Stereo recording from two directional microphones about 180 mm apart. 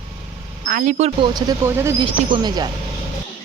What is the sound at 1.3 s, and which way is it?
Speech, 20° right (ahead or behind).